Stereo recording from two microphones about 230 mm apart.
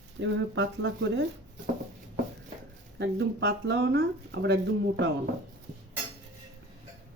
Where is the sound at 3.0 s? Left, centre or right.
Right.